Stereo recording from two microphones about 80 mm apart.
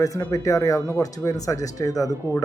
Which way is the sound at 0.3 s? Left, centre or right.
Left.